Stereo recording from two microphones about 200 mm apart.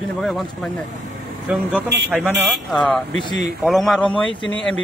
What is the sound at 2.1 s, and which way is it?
Speech, centre (ahead or behind).